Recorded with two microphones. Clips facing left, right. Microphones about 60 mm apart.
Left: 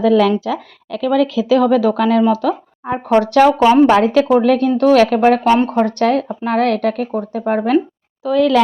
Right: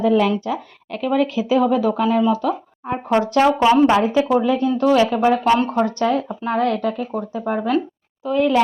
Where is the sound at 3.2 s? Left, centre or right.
Left.